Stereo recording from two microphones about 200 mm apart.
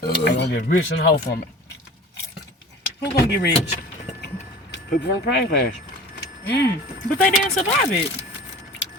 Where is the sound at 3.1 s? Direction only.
55° left (ahead or behind).